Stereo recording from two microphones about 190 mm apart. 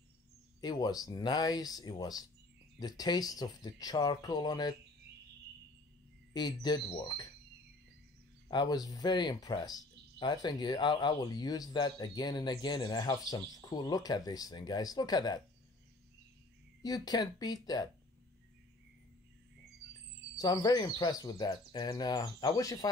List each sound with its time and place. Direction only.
0.6 s speech: 20° left (ahead or behind)
6.3 s speech: 20° left (ahead or behind)
8.5 s speech: 20° left (ahead or behind)
16.8 s speech: 20° left (ahead or behind)
20.3 s speech: 20° left (ahead or behind)